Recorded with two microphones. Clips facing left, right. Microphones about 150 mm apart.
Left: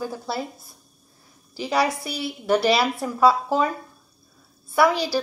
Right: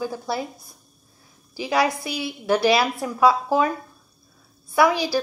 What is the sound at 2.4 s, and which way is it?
Speech, 5° left (ahead or behind).